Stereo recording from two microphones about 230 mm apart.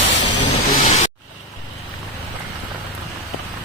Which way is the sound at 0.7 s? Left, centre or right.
Left.